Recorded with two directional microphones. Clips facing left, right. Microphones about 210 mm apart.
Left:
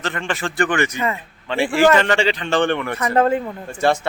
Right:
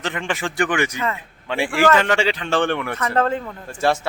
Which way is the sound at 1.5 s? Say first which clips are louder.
Left 2 dB; 10° right (ahead or behind).